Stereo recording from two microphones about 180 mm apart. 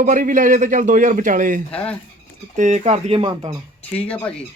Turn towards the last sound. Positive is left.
turn(degrees=5)  # may be behind; listen again after turning